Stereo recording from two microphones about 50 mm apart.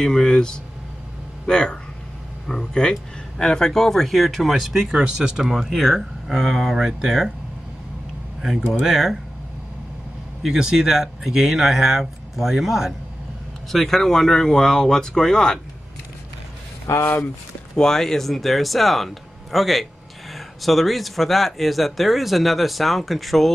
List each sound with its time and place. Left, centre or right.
0.0 s speech: centre
8.4 s speech: centre
10.4 s speech: centre
13.7 s speech: centre
16.8 s speech: left
17.7 s speech: centre